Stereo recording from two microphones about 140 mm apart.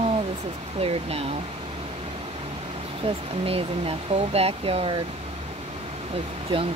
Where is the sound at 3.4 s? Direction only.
45° right (ahead or behind).